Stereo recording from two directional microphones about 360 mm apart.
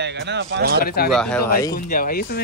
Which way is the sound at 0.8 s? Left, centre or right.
Left.